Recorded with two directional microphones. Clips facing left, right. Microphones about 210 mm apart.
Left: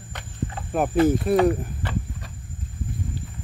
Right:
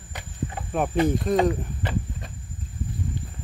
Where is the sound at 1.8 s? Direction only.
20° right (ahead or behind).